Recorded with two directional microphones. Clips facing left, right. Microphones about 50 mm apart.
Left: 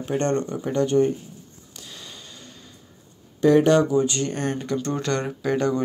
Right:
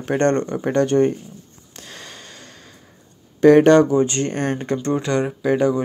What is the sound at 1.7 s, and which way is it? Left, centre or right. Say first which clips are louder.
Sniff: right 4 dB; right.